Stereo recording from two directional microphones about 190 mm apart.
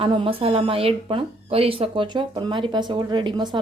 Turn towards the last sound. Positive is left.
turn(degrees=-25)  # may be behind; listen again after turning